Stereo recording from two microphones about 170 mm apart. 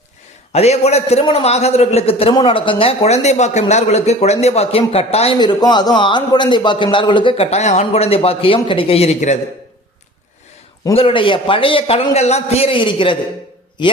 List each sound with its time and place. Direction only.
0.5 s speech: 40° left (ahead or behind)
10.9 s speech: 30° left (ahead or behind)